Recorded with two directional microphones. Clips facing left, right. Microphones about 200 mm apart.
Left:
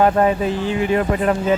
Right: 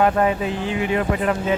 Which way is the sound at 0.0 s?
35° left (ahead or behind).